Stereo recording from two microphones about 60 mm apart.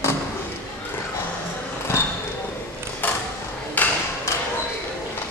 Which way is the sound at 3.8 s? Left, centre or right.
Left.